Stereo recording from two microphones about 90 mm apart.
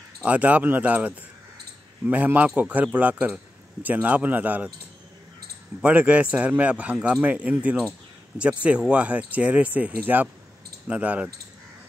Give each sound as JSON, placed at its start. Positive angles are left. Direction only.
{"t": 0.2, "sound": "a man's voice", "side_deg": -15}
{"t": 5.8, "sound": "a man's voice", "side_deg": -15}